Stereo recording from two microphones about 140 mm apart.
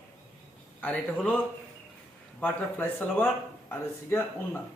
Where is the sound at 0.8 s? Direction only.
10° left (ahead or behind).